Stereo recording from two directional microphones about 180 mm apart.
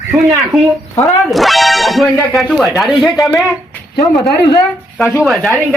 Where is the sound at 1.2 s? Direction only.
Centre (ahead or behind).